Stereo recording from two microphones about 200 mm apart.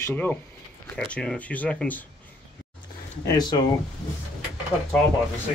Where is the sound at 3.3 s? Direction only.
20° left (ahead or behind).